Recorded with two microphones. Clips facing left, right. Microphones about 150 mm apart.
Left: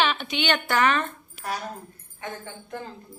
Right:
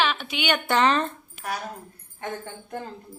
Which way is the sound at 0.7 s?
30° right (ahead or behind).